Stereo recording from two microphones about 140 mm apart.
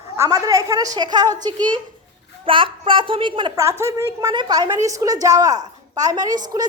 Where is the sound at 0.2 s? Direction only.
25° right (ahead or behind).